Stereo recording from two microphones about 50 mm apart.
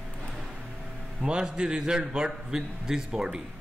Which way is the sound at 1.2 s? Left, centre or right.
Centre.